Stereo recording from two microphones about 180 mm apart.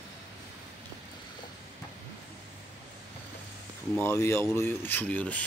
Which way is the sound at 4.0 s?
15° left (ahead or behind).